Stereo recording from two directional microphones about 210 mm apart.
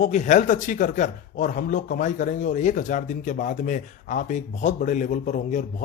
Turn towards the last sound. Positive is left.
turn(degrees=35)  # may be behind; listen again after turning